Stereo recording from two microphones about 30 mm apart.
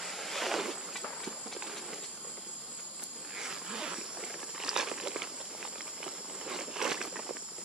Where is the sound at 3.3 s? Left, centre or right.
Centre.